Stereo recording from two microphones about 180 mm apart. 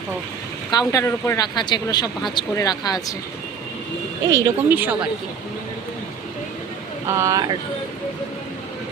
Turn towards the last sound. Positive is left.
turn(degrees=-20)  # may be behind; listen again after turning